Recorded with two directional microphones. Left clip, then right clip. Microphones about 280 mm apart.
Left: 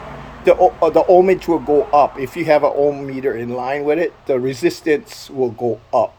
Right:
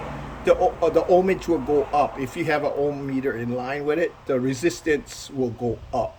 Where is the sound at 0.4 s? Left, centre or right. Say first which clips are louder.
Left 7 dB; centre.